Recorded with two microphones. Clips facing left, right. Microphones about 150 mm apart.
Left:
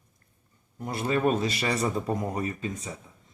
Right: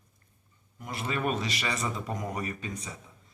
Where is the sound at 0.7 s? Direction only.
35° left (ahead or behind).